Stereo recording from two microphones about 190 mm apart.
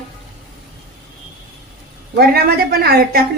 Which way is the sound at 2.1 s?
55° right (ahead or behind).